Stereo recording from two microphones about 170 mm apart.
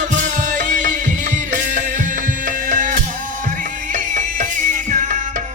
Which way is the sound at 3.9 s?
50° right (ahead or behind).